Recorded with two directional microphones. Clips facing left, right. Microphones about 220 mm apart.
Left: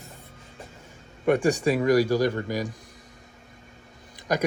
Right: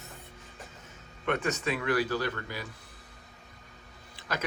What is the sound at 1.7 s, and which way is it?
Speech, 40° left (ahead or behind).